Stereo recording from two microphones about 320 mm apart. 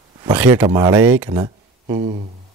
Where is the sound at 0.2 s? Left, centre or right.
Centre.